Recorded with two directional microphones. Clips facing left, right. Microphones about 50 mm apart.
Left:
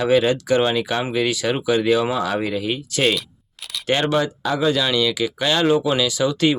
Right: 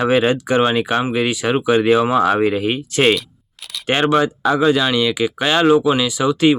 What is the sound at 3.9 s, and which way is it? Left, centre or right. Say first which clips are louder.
Speech: right 4 dB; right.